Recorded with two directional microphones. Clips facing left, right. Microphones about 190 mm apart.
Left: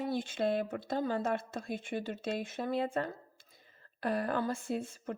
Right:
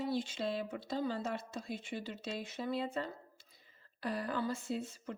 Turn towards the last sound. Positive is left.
turn(degrees=50)  # may be behind; listen again after turning